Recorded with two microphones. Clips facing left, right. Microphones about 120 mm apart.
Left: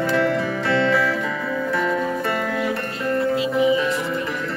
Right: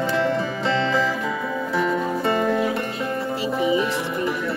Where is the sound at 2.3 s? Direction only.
20° right (ahead or behind).